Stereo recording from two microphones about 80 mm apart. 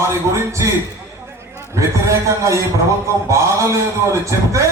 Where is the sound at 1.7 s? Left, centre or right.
Right.